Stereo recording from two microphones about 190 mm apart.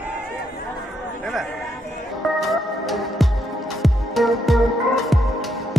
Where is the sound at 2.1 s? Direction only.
Centre (ahead or behind).